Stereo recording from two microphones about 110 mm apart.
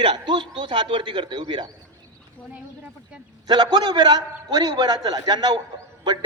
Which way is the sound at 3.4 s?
40° right (ahead or behind).